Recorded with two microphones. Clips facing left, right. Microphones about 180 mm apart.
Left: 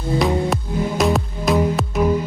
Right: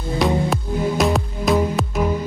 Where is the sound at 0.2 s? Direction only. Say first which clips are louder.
Right 2 dB; centre (ahead or behind).